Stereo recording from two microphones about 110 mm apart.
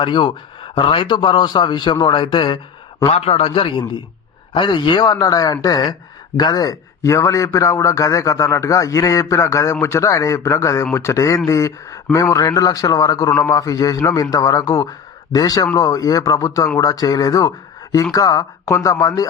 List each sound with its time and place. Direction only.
0.0 s a man's voice: 45° left (ahead or behind)
3.1 s a man's voice: 65° left (ahead or behind); by 19.3 s 35° left (ahead or behind)